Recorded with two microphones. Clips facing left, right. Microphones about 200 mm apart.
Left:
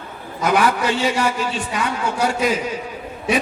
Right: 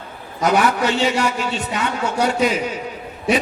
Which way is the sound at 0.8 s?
25° right (ahead or behind).